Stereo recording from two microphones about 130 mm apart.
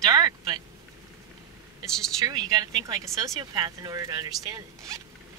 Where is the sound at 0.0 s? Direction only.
30° right (ahead or behind).